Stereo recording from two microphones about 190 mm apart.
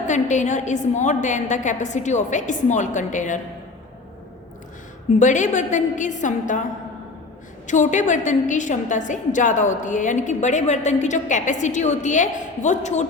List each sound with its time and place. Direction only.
0.1 s a woman's voice: 40° left (ahead or behind)
5.2 s a woman's voice: 40° left (ahead or behind)
7.7 s a woman's voice: 40° left (ahead or behind)